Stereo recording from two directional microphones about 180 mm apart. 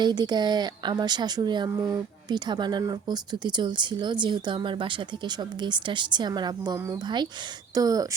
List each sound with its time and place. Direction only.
0.0 s a woman's voice: 25° right (ahead or behind)